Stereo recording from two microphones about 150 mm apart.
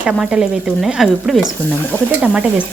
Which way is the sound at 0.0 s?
5° right (ahead or behind).